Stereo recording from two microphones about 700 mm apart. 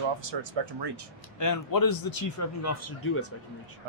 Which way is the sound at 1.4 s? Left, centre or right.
Left.